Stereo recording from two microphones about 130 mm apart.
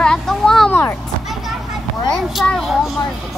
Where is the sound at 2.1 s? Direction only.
Centre (ahead or behind).